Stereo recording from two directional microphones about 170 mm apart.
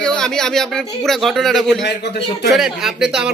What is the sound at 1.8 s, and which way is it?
Speech, 90° left.